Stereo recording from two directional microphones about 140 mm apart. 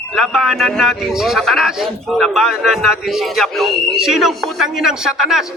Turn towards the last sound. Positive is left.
turn(degrees=-5)  # may be behind; listen again after turning